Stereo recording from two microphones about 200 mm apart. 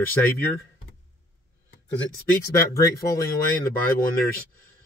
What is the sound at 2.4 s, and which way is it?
Speech, 15° left (ahead or behind).